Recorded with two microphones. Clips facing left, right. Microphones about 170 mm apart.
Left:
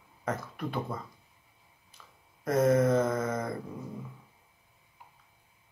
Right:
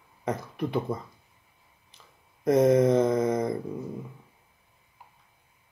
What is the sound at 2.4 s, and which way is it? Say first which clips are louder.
Speech: right 4 dB; 15° right (ahead or behind).